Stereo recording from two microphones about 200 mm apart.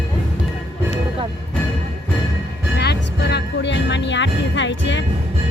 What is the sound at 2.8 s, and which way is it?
Music, 55° left (ahead or behind).